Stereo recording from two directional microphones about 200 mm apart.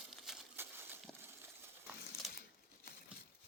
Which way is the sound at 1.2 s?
10° right (ahead or behind).